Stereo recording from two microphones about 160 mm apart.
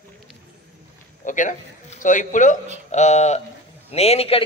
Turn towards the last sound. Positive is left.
turn(degrees=40)  # may be behind; listen again after turning